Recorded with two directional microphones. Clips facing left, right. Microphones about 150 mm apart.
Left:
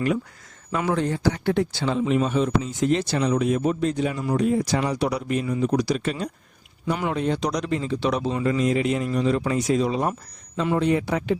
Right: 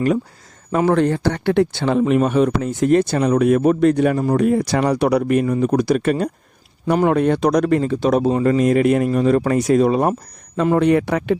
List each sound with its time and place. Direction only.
0.9 s speech: 65° right (ahead or behind)